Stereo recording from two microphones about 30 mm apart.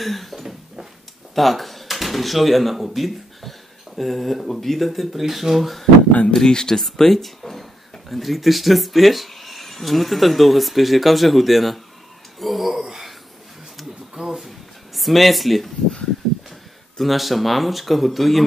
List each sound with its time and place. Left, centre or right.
0.0 s speech: centre
0.4 s a sound: centre
1.3 s speech: centre
6.3 s speech: left
6.8 s speech: centre
14.1 s a sound: centre
15.0 s speech: centre
17.0 s speech: centre